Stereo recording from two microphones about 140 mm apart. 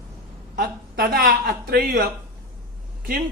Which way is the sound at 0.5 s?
90° right.